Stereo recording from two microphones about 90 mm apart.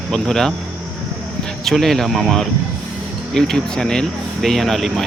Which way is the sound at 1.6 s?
Centre (ahead or behind).